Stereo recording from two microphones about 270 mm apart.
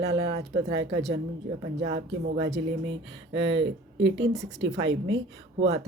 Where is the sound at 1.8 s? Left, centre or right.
Right.